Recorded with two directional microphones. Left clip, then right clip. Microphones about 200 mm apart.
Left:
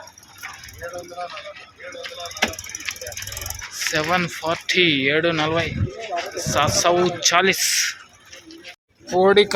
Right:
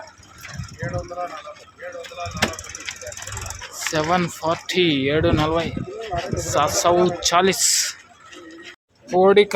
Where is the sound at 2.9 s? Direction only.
45° left (ahead or behind).